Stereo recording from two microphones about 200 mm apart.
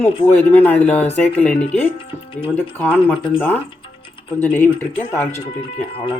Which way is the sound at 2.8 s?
10° left (ahead or behind).